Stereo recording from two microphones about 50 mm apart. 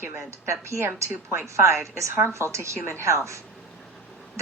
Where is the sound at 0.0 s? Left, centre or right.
Right.